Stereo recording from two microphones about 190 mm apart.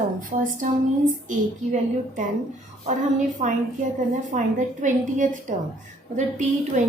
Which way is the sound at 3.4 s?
40° right (ahead or behind).